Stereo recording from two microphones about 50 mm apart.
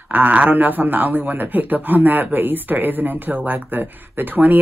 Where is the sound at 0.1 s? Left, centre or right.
Right.